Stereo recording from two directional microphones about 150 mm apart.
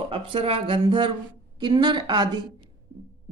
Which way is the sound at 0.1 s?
40° right (ahead or behind).